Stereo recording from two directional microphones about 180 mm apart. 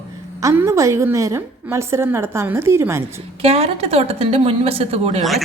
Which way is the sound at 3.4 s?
35° right (ahead or behind).